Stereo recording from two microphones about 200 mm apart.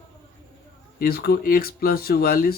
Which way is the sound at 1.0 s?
50° left (ahead or behind).